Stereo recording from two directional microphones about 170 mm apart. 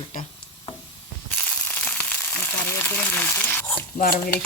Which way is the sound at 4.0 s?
55° left (ahead or behind).